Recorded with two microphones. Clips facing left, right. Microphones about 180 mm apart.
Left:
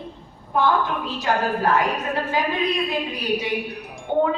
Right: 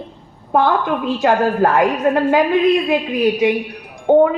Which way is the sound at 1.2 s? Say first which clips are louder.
Right 7 dB; 55° right (ahead or behind).